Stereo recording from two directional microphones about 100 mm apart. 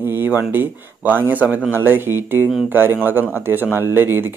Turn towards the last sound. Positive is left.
turn(degrees=-25)  # may be behind; listen again after turning